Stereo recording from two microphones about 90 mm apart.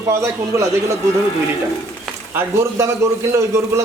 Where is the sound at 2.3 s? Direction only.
30° right (ahead or behind).